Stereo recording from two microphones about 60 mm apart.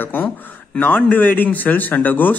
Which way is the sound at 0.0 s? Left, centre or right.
Left.